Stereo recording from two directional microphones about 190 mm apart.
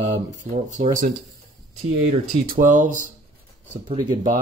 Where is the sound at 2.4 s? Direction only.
45° right (ahead or behind).